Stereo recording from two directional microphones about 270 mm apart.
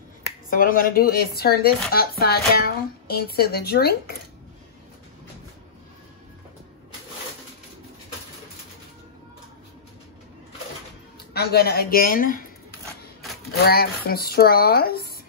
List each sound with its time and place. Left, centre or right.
0.5 s speech: left
11.3 s speech: left
13.7 s speech: left